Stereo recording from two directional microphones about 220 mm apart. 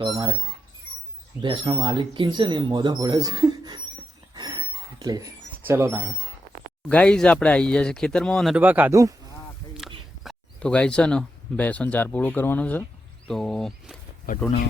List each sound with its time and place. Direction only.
0.0 s speech: 20° right (ahead or behind)
1.4 s speech: 20° right (ahead or behind)
4.4 s a sound: 20° right (ahead or behind)
6.8 s speech: 5° left (ahead or behind); by 9.1 s 15° right (ahead or behind)
10.2 s speech: 5° left (ahead or behind)
14.3 s speech: 40° left (ahead or behind)